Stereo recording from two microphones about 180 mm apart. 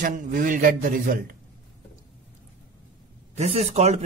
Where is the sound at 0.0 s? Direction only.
50° right (ahead or behind).